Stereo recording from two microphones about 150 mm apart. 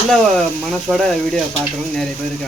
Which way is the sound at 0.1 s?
Centre (ahead or behind).